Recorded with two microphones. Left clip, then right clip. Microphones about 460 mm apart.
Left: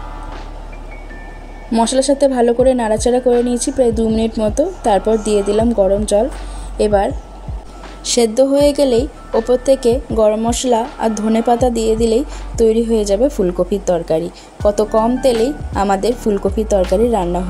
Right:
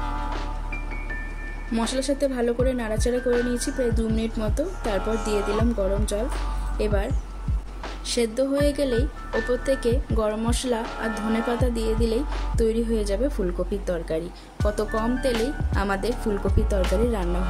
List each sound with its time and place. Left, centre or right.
1.7 s speech: right